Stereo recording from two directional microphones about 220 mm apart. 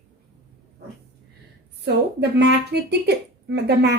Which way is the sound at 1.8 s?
50° right (ahead or behind).